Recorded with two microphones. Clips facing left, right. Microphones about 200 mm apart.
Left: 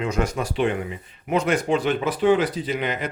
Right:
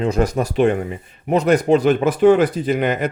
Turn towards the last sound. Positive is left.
turn(degrees=-50)  # may be behind; listen again after turning